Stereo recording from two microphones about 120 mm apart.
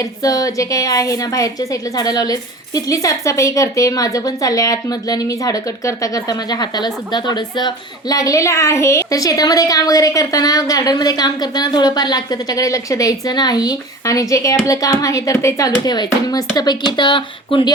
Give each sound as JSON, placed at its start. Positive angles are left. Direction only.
{"t": 0.0, "sound": "a woman's voice", "side_deg": 30}